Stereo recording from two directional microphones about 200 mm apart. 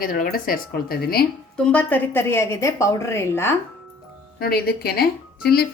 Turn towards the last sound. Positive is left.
turn(degrees=50)  # may be behind; listen again after turning